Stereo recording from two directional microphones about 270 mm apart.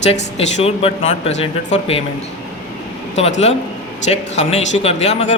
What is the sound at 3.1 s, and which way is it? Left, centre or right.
Speech, left.